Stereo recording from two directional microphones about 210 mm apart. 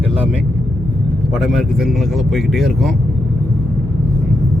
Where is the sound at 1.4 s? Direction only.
Centre (ahead or behind).